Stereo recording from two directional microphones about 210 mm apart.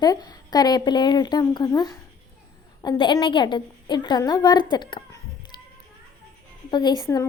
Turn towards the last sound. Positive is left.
turn(degrees=20)  # may be behind; listen again after turning